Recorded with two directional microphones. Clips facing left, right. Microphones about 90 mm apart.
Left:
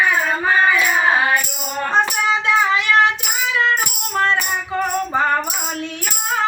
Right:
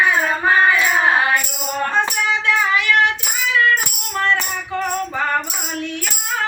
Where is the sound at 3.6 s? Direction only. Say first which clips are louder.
Right 3 dB; 25° left (ahead or behind).